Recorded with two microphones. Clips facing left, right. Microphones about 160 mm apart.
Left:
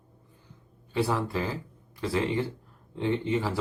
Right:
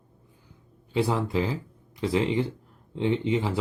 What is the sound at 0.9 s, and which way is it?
Speech, 15° right (ahead or behind).